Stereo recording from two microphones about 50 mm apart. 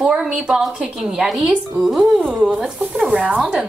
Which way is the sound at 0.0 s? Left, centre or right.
Centre.